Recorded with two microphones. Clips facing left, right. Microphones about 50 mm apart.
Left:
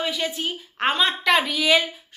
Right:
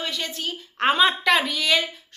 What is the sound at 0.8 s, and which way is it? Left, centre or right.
A woman's voice, centre.